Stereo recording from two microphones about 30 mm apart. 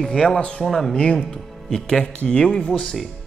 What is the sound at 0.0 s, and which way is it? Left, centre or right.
Speech, centre.